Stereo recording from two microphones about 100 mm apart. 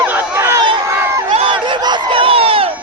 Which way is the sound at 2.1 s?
65° right (ahead or behind).